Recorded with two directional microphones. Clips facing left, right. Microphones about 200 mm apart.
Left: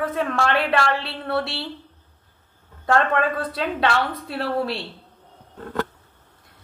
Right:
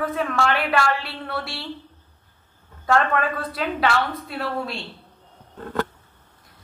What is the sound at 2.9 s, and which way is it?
Speech, 30° left (ahead or behind).